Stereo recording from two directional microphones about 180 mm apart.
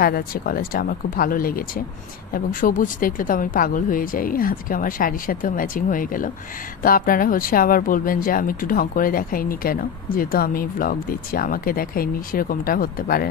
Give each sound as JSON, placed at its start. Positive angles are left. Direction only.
{"t": 0.0, "sound": "speech", "side_deg": 55}